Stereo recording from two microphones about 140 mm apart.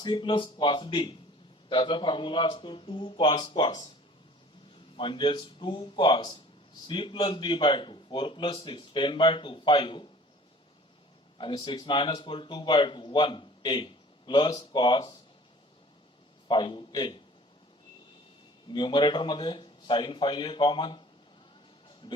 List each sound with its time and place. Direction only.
0.0 s a man's voice: 35° left (ahead or behind)
4.9 s a man's voice: 35° left (ahead or behind)
11.3 s a man's voice: 35° left (ahead or behind)
16.5 s a man's voice: 35° left (ahead or behind)
18.7 s a man's voice: 35° left (ahead or behind)